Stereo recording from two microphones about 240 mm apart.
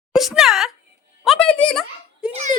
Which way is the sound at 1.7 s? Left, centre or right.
Centre.